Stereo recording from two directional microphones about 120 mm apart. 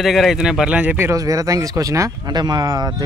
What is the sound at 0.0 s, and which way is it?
Speech, centre (ahead or behind).